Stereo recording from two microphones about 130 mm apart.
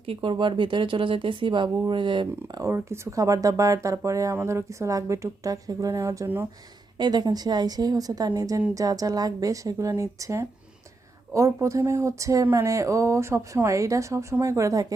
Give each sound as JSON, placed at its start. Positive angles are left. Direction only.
{"t": 0.0, "sound": "speech", "side_deg": -45}
{"t": 6.9, "sound": "speech", "side_deg": -35}